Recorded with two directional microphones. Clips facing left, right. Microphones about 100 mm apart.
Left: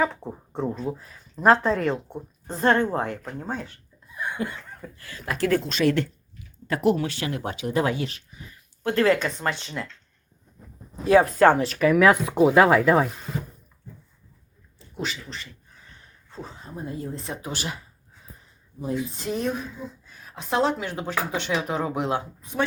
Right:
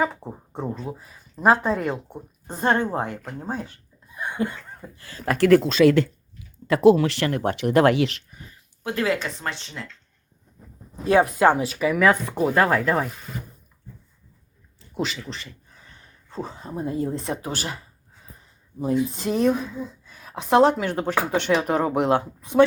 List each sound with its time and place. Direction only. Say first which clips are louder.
0.0 s a woman's voice: even; 5° right (ahead or behind)
4.1 s a sound: right 3 dB; 20° right (ahead or behind)
5.4 s speech: right 7 dB; 80° right
6.7 s speech: right 7 dB; 90° right
7.3 s speech: right 6 dB; 55° right (ahead or behind); by 8.2 s 85° right
8.8 s speech: left 4 dB; 5° right (ahead or behind)
11.3 s speech: left 1 dB; 10° right (ahead or behind); by 13.4 s 5° left (ahead or behind)
14.9 s speech: right 4 dB; 90° right
16.3 s speech: right 6 dB; 60° right (ahead or behind)
17.4 s speech: right 2 dB; 40° right (ahead or behind)
18.9 s speech: right 5 dB; 65° right (ahead or behind)